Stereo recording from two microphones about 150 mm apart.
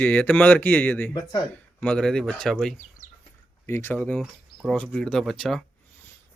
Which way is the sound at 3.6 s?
15° left (ahead or behind).